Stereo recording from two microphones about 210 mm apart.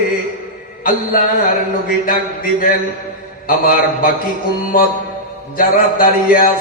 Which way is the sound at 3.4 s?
45° left (ahead or behind).